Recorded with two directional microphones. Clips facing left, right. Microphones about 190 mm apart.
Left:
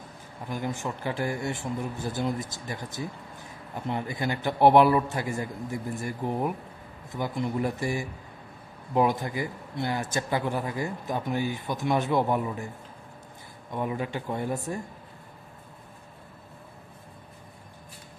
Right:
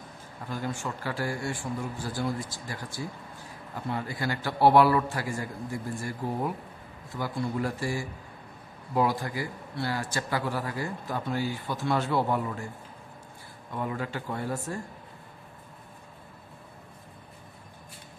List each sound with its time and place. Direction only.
0.5 s speech: 20° left (ahead or behind)
13.7 s speech: 20° left (ahead or behind)